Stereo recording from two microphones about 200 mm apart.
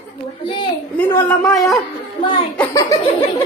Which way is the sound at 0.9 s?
5° left (ahead or behind).